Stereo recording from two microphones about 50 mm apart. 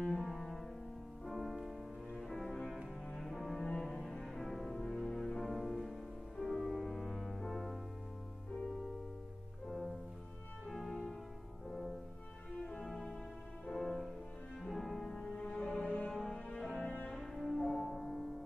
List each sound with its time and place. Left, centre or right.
0.0 s music: centre
1.2 s music: centre
2.1 s music: centre
10.7 s music: centre
12.8 s music: centre
15.8 s music: left
16.8 s cello: left
17.1 s music: centre